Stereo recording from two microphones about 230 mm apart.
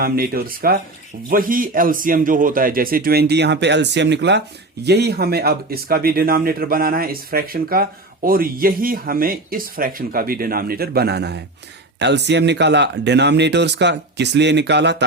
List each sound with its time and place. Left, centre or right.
0.0 s speech: right